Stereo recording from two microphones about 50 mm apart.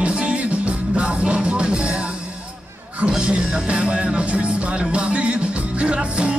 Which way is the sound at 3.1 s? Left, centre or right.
Centre.